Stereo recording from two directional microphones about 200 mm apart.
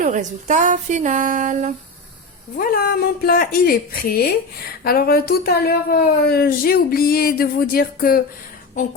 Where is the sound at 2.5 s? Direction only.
45° left (ahead or behind).